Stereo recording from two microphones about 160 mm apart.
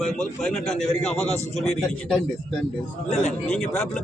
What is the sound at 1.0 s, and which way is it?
Speech, 40° left (ahead or behind).